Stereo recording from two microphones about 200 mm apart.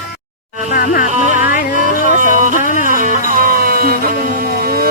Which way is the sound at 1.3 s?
45° left (ahead or behind).